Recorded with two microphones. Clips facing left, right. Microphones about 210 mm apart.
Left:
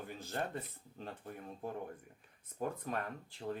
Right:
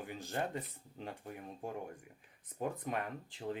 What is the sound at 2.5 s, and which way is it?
Speech, 15° right (ahead or behind).